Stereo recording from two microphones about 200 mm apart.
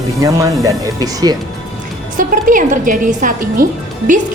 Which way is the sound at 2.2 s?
40° right (ahead or behind).